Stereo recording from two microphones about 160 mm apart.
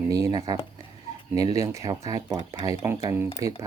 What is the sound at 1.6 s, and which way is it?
Speech, 20° right (ahead or behind).